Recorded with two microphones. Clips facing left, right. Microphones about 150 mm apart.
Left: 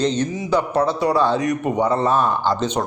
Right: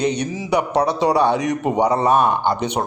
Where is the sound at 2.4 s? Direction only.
65° right (ahead or behind).